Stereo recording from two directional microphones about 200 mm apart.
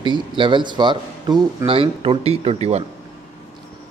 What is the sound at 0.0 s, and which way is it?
Speech, 25° right (ahead or behind).